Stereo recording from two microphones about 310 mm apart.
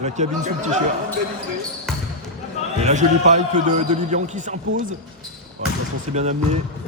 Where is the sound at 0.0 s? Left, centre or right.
Right.